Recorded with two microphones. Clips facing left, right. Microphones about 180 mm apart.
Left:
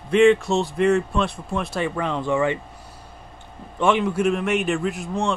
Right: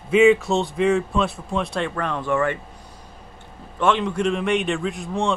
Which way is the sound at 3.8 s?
10° left (ahead or behind).